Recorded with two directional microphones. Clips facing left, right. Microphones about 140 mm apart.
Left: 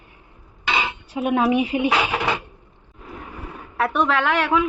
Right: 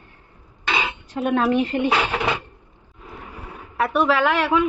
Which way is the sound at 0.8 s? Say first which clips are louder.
Even; 10° left (ahead or behind).